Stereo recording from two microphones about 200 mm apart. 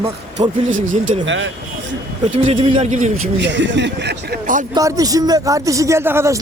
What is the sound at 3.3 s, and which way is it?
Speech, 65° right (ahead or behind).